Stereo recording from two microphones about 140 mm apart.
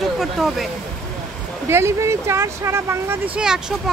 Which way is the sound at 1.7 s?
20° right (ahead or behind).